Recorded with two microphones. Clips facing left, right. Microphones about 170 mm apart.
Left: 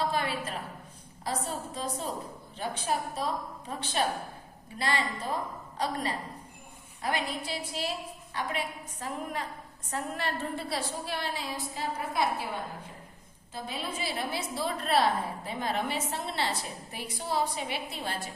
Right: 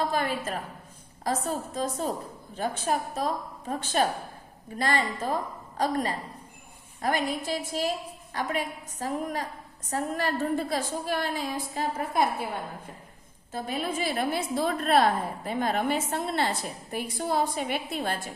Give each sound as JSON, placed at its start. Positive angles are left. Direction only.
{"t": 0.1, "sound": "a woman's voice", "side_deg": -45}
{"t": 13.5, "sound": "a woman's voice", "side_deg": -50}